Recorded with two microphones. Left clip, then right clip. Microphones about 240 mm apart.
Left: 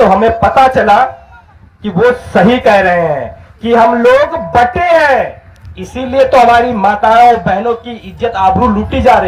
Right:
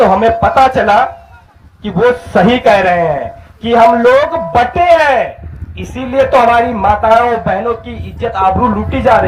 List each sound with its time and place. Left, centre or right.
0.0 s a man's voice: left